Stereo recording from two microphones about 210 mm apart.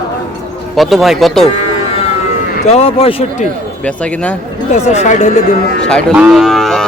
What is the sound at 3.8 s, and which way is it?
Speech, 5° left (ahead or behind).